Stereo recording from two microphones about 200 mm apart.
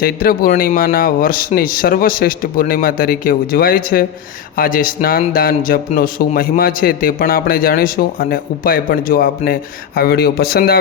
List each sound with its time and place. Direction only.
0.0 s speech: 45° left (ahead or behind)